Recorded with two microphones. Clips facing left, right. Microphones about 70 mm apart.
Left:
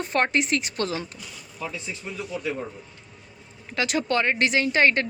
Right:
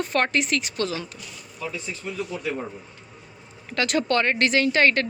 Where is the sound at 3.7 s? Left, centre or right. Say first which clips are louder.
Right 2 dB; centre.